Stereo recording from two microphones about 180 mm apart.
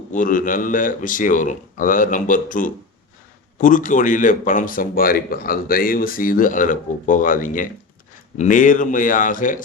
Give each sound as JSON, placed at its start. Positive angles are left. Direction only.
{"t": 0.1, "sound": "speech", "side_deg": 45}